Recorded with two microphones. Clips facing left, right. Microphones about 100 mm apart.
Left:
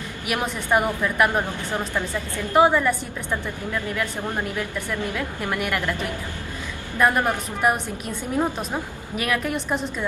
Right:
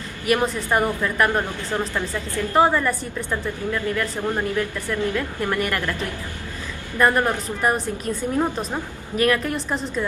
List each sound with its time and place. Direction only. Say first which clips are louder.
0.3 s speech: right 2 dB; 10° left (ahead or behind)
2.5 s a woman's voice: left 1 dB; 5° left (ahead or behind)
5.0 s a woman's voice: right 3 dB; 10° left (ahead or behind)